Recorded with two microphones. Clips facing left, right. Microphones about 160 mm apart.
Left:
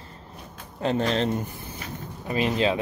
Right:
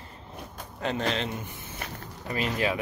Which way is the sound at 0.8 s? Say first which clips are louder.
Left 5 dB; 35° left (ahead or behind).